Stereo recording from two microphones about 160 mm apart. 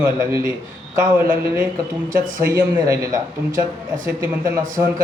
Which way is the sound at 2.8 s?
20° right (ahead or behind).